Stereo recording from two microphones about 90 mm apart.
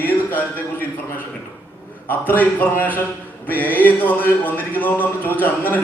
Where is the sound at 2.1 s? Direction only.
20° left (ahead or behind).